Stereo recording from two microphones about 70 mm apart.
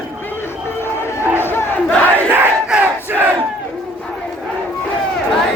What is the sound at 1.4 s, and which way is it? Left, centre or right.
Battle cry, left.